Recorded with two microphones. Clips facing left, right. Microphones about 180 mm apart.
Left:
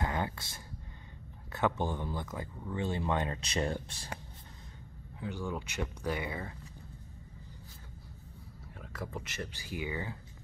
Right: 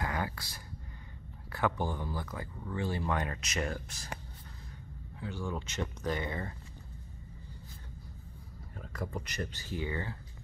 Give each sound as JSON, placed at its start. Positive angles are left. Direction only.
{"t": 0.0, "sound": "a sound", "side_deg": 25}
{"t": 1.5, "sound": "speech", "side_deg": 20}
{"t": 5.2, "sound": "speech", "side_deg": 15}
{"t": 8.7, "sound": "speech", "side_deg": 5}